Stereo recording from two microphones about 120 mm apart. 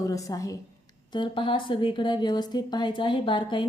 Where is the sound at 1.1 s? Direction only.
45° left (ahead or behind).